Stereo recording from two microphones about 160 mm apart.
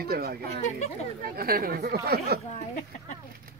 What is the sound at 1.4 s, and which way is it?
Speech, 70° right (ahead or behind).